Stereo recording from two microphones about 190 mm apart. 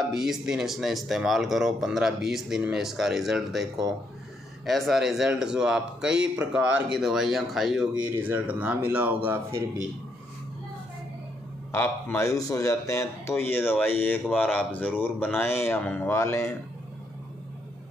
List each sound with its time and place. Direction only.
0.1 s speech: 5° right (ahead or behind)
11.7 s speech: 10° left (ahead or behind)